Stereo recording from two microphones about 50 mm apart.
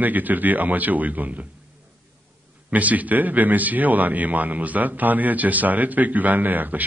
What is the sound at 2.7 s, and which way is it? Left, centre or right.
A man's voice, right.